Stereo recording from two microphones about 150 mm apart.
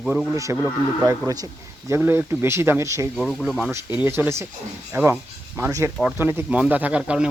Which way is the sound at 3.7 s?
20° right (ahead or behind).